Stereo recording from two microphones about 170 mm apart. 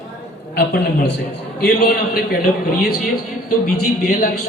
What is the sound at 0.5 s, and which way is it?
A man's voice, 75° left (ahead or behind).